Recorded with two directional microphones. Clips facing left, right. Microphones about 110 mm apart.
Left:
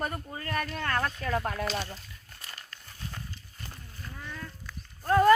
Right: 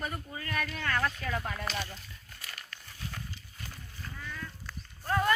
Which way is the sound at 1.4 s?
60° left (ahead or behind).